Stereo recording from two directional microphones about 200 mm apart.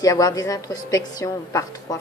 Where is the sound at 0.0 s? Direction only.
20° left (ahead or behind).